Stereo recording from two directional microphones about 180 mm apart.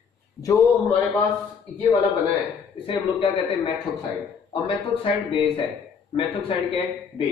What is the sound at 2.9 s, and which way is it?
Speech, 30° left (ahead or behind).